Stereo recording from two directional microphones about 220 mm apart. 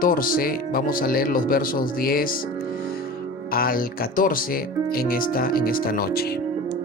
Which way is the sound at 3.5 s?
40° left (ahead or behind).